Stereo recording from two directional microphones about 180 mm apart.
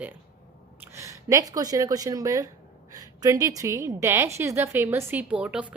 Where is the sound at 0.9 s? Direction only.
20° right (ahead or behind).